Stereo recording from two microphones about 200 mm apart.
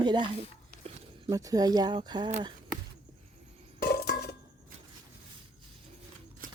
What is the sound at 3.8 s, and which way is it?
Chink, 50° left (ahead or behind).